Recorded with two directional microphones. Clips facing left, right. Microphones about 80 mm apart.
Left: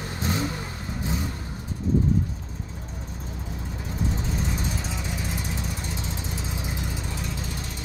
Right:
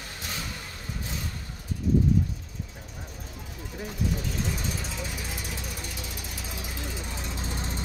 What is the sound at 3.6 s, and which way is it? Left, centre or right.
Vehicle, left.